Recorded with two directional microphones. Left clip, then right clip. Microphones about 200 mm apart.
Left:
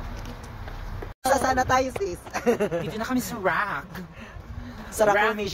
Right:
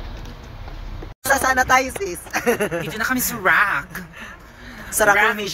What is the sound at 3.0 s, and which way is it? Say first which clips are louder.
Speech: right 8 dB; 10° left (ahead or behind).